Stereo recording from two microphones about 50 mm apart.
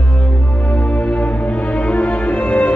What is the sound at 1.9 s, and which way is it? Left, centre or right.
Music, left.